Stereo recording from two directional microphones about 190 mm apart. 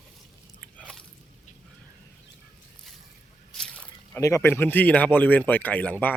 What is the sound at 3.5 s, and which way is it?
Speech, 5° left (ahead or behind).